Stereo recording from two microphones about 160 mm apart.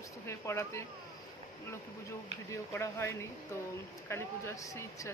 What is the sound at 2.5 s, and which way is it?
A woman's voice, 15° left (ahead or behind).